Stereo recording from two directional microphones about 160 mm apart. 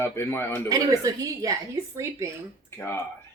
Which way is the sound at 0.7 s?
20° right (ahead or behind).